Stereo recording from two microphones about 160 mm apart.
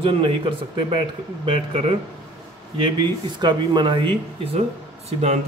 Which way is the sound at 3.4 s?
25° right (ahead or behind).